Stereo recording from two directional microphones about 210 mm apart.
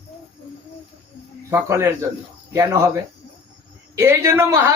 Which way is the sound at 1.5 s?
10° right (ahead or behind).